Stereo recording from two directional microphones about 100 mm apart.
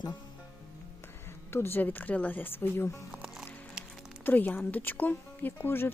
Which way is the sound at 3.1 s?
5° right (ahead or behind).